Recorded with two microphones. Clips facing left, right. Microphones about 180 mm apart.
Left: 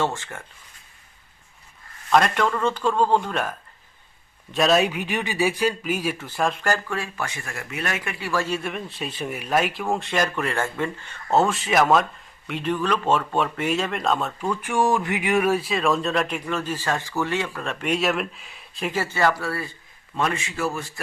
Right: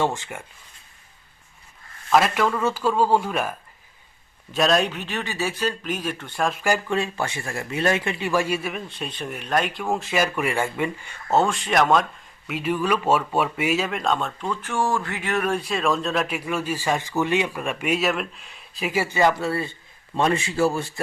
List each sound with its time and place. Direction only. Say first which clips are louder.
0.0 s speech: right 1 dB; 15° right (ahead or behind)
2.0 s speech: even; 5° right (ahead or behind)
4.5 s speech: left 1 dB; centre (ahead or behind)
11.3 s a man's voice: even; centre (ahead or behind); by 21.0 s 30° right (ahead or behind)